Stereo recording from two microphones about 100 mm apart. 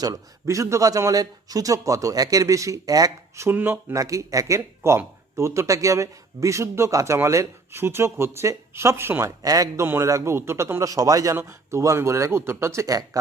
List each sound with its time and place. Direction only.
0.0 s a man's voice: 35° right (ahead or behind)
9.2 s a man's voice: 35° right (ahead or behind)
9.8 s speech: 25° right (ahead or behind)